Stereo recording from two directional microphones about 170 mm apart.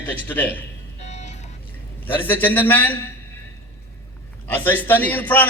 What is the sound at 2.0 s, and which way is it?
Speech, 10° left (ahead or behind).